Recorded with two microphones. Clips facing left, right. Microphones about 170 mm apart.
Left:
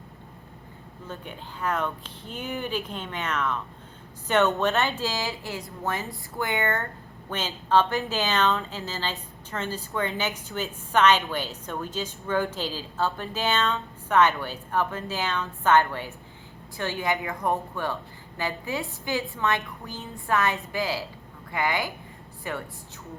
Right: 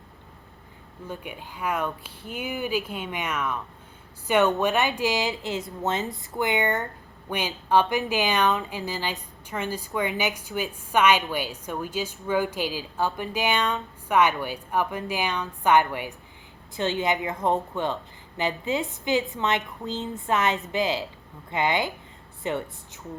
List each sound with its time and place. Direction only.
1.0 s a woman's voice: 10° right (ahead or behind)